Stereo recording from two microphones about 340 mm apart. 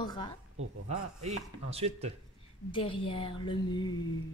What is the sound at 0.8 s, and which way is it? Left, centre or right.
Speech, centre.